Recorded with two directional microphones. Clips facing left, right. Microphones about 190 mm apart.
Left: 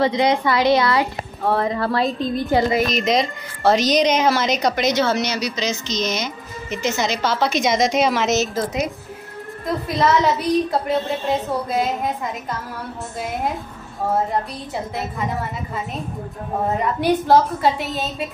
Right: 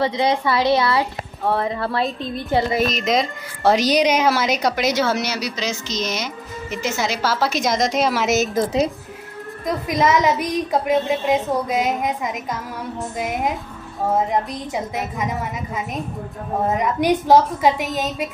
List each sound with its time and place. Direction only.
0.3 s a woman's voice: 25° right (ahead or behind)
2.9 s a woman's voice: centre (ahead or behind)
9.8 s a woman's voice: 15° right (ahead or behind)
16.6 s a woman's voice: 15° right (ahead or behind)